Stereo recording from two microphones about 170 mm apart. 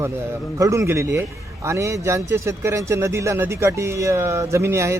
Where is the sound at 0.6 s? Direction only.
15° right (ahead or behind).